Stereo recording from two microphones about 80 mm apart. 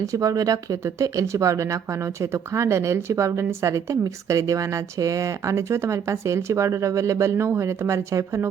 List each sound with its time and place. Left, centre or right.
0.0 s speech: right